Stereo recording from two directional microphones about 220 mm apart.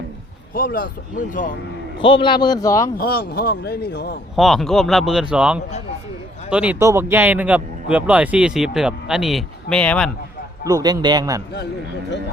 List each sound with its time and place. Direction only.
0.5 s speech: 40° left (ahead or behind)
2.0 s a man's voice: 20° left (ahead or behind)
3.0 s a man's voice: 45° left (ahead or behind)
4.4 s speech: centre (ahead or behind)
10.7 s a man's voice: 15° right (ahead or behind)